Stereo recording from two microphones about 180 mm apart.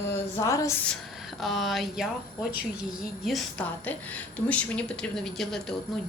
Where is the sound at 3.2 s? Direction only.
Centre (ahead or behind).